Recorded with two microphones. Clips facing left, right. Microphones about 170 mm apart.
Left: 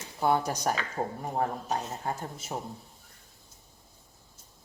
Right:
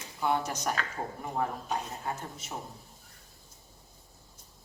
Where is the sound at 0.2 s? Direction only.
40° left (ahead or behind).